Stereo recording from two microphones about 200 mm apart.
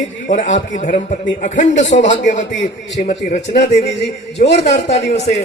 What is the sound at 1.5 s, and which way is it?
A man's voice, 65° left (ahead or behind).